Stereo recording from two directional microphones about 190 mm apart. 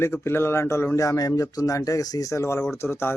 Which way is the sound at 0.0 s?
15° left (ahead or behind).